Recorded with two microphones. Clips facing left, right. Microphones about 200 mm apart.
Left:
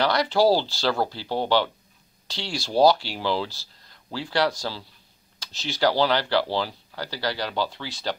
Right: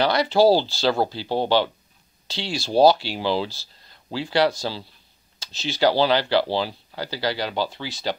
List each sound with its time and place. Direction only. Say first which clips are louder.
0.0 s speech: right 3 dB; 20° right (ahead or behind)